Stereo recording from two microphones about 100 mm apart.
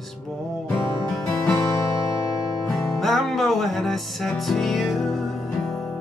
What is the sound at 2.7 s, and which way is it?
Music, centre (ahead or behind).